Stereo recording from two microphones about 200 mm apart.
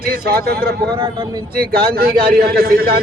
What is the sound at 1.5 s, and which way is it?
A man's voice, 50° right (ahead or behind).